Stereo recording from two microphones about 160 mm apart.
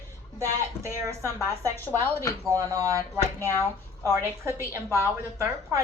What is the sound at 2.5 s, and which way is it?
Speech, 20° right (ahead or behind).